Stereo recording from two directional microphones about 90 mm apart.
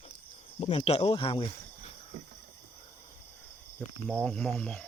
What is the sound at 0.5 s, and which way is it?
Speech, 80° left.